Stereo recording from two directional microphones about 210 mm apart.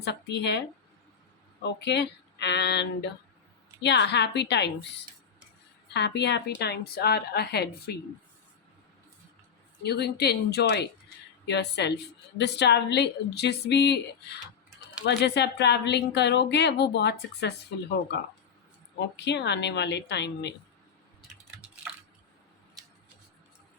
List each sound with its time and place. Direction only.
0.0 s a woman's voice: 55° left (ahead or behind)
1.8 s a woman's voice: 55° left (ahead or behind)
5.9 s a woman's voice: 55° left (ahead or behind)
9.8 s a woman's voice: 50° left (ahead or behind)
19.1 s a woman's voice: 55° left (ahead or behind)